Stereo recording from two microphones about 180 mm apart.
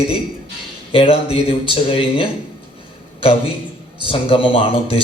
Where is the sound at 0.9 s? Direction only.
30° left (ahead or behind).